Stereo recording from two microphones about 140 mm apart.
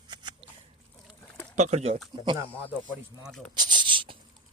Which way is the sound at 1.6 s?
55° right (ahead or behind).